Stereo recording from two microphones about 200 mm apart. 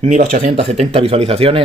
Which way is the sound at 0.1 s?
35° right (ahead or behind).